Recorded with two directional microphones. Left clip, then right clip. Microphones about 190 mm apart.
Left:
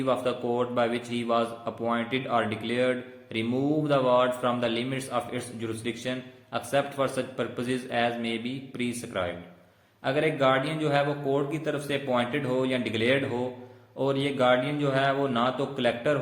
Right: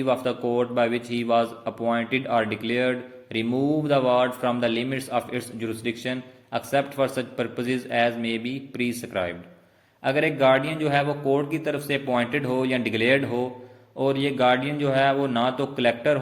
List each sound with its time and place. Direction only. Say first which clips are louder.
0.0 s a man's voice: right 3 dB; 35° right (ahead or behind)